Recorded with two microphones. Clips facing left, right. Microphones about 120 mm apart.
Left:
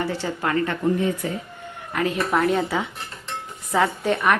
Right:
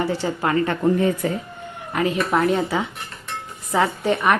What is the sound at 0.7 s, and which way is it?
Speech, 50° right (ahead or behind).